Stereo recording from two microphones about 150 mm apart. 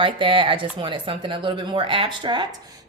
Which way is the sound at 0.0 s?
35° right (ahead or behind).